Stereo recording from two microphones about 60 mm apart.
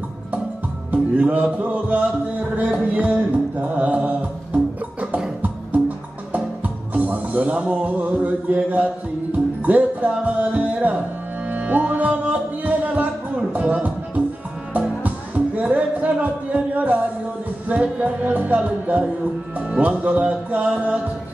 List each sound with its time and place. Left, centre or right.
0.9 s music: right
6.9 s music: right